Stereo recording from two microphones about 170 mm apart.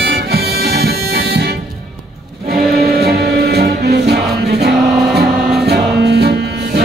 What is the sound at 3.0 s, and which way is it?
Music, 70° right (ahead or behind).